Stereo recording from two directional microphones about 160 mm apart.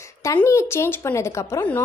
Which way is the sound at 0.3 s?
15° left (ahead or behind).